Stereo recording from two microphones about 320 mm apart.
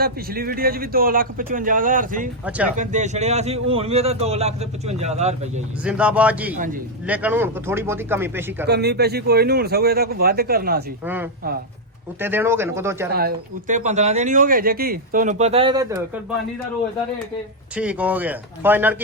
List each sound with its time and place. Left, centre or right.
0.0 s speech: right
2.4 s speech: centre
2.7 s speech: right
5.8 s speech: centre
8.6 s speech: right
11.0 s speech: centre
13.1 s speech: right
17.7 s speech: centre